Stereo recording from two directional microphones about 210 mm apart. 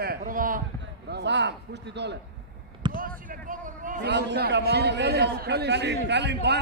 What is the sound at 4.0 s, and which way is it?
A man's voice, 55° right (ahead or behind).